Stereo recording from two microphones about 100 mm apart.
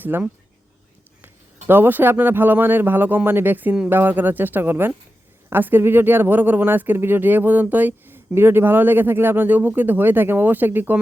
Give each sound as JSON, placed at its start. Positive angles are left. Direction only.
{"t": 0.0, "sound": "speech", "side_deg": -20}